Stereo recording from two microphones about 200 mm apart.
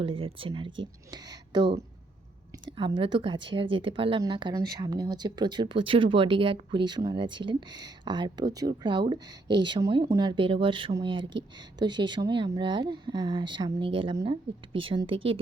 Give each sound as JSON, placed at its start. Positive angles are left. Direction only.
{"t": 0.0, "sound": "speech", "side_deg": -25}
{"t": 2.6, "sound": "speech", "side_deg": -25}